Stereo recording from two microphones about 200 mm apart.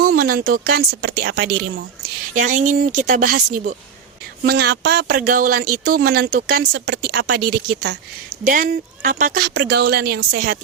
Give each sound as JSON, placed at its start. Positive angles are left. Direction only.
{"t": 0.0, "sound": "speech", "side_deg": -45}
{"t": 2.4, "sound": "speech", "side_deg": -40}